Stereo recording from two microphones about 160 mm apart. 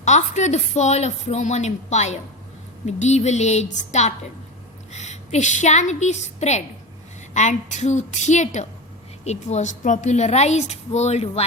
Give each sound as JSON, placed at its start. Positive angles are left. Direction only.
{"t": 0.0, "sound": "a woman's voice", "side_deg": 45}